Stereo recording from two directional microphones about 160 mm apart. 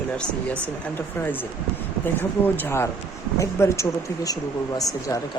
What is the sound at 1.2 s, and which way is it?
Speech, 10° left (ahead or behind).